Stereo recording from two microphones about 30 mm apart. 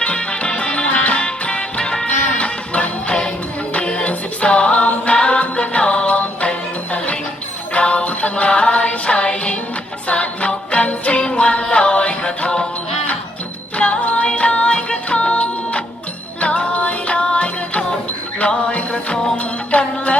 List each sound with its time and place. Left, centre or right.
0.0 s music: left
2.4 s music: left
8.4 s music: left
13.7 s music: left